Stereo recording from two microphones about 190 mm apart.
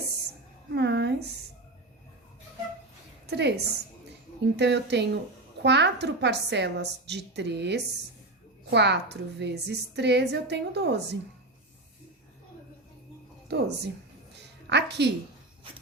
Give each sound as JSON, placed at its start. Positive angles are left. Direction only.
{"t": 0.7, "sound": "a sound", "side_deg": -65}
{"t": 3.2, "sound": "a woman's voice", "side_deg": -60}
{"t": 13.5, "sound": "a woman's voice", "side_deg": -60}
{"t": 14.3, "sound": "music", "side_deg": -65}